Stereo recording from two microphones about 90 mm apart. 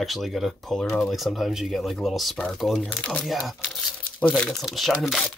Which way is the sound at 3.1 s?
Centre (ahead or behind).